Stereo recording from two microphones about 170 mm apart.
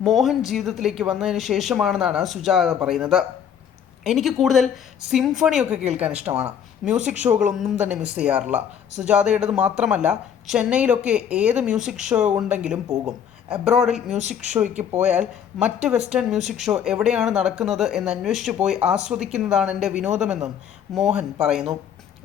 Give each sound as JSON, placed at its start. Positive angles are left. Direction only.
{"t": 0.0, "sound": "speech", "side_deg": 0}
{"t": 14.2, "sound": "a woman's voice", "side_deg": -45}
{"t": 15.0, "sound": "speech", "side_deg": -5}